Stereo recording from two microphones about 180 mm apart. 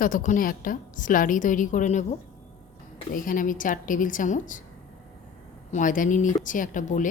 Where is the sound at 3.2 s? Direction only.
50° left (ahead or behind).